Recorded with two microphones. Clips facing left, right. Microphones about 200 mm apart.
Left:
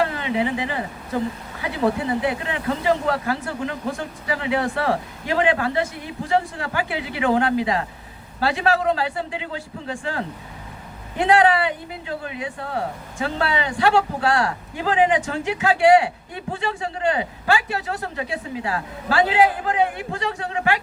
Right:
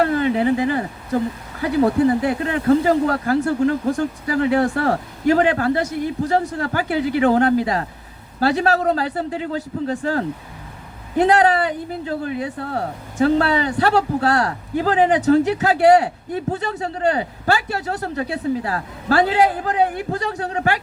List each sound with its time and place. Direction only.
0.0 s speech: 40° right (ahead or behind)